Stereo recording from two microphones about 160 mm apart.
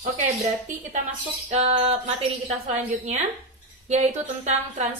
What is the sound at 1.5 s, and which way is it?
A woman's voice, 40° right (ahead or behind).